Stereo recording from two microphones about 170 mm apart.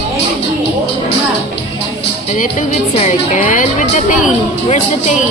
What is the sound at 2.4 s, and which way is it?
A woman's voice, 45° left (ahead or behind).